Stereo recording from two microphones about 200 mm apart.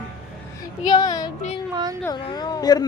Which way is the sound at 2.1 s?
20° left (ahead or behind).